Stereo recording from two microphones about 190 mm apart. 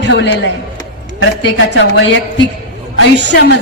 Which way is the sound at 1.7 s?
70° left (ahead or behind).